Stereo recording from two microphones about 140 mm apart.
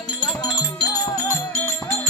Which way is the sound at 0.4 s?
30° left (ahead or behind).